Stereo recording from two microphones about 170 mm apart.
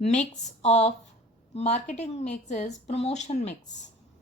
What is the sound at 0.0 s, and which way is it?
A woman's voice, 40° left (ahead or behind).